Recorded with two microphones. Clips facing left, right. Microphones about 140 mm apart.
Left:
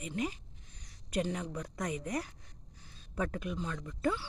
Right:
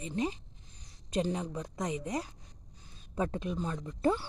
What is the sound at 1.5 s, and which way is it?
A woman's voice, 15° right (ahead or behind).